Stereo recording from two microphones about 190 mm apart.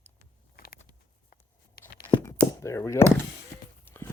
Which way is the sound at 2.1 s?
15° left (ahead or behind).